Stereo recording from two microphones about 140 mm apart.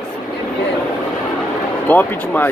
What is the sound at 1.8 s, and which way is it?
Speech, 10° left (ahead or behind).